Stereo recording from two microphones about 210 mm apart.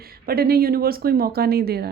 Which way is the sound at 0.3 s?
45° right (ahead or behind).